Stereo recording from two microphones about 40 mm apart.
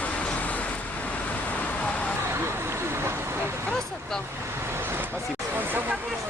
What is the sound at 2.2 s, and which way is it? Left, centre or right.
Vehicle, right.